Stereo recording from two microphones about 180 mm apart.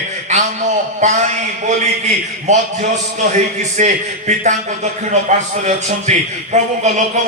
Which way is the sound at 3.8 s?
40° right (ahead or behind).